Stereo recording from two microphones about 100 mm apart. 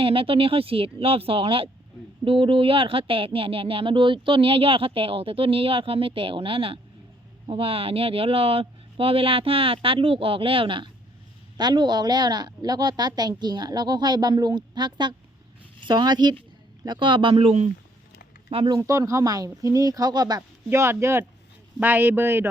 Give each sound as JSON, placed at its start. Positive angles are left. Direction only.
{"t": 0.0, "sound": "speech", "side_deg": -65}
{"t": 11.5, "sound": "a woman's voice", "side_deg": -45}
{"t": 17.3, "sound": "speech", "side_deg": -90}
{"t": 18.8, "sound": "speech", "side_deg": -30}
{"t": 20.7, "sound": "speech", "side_deg": -25}